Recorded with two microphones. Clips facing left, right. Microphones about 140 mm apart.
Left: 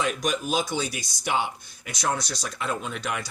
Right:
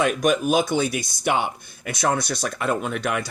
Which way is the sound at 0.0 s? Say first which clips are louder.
Right 7 dB; 55° right (ahead or behind).